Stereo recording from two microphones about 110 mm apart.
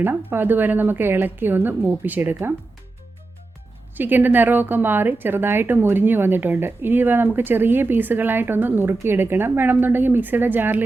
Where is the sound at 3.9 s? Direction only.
15° right (ahead or behind).